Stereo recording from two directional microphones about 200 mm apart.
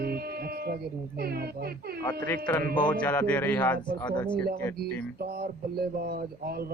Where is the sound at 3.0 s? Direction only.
10° left (ahead or behind).